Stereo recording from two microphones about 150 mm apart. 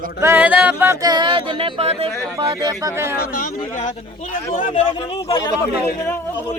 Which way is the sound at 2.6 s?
20° right (ahead or behind).